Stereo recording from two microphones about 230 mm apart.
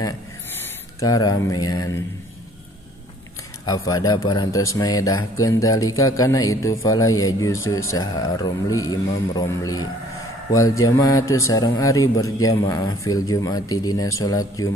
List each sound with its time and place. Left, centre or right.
0.9 s a man's voice: centre
3.6 s a man's voice: centre
11.0 s a man's voice: centre